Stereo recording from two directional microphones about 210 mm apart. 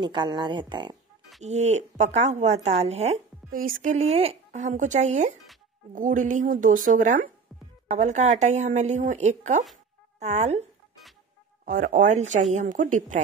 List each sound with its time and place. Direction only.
0.0 s speech: 20° right (ahead or behind)
1.4 s speech: 30° right (ahead or behind)
11.6 s speech: 40° right (ahead or behind)